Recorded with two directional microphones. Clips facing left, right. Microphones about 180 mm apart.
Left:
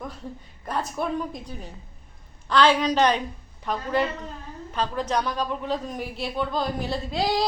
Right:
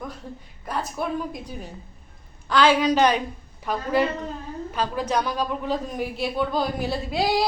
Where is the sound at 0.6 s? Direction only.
Centre (ahead or behind).